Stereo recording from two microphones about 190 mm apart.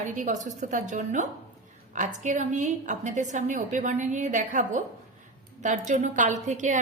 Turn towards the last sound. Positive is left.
turn(degrees=-40)  # may be behind; listen again after turning